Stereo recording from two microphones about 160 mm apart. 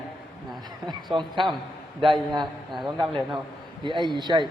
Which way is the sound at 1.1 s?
30° right (ahead or behind).